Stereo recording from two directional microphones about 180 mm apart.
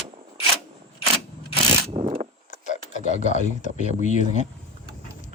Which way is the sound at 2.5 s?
45° left (ahead or behind).